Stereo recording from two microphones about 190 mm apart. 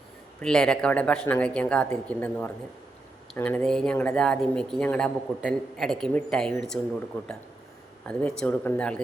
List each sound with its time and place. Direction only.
0.4 s speech: 5° left (ahead or behind)